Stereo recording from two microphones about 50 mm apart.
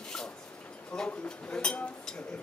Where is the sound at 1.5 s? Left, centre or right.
Centre.